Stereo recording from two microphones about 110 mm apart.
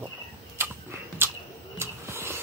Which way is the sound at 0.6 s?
20° right (ahead or behind).